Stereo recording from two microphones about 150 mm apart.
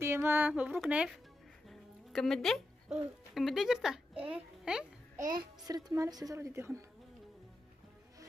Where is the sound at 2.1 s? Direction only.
5° left (ahead or behind).